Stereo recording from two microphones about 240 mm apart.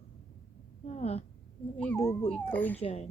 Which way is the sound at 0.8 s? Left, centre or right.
Left.